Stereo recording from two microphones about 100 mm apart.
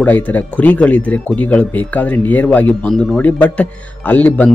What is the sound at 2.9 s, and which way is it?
Speech, centre (ahead or behind).